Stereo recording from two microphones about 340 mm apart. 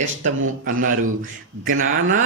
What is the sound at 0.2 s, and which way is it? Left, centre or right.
Speech, right.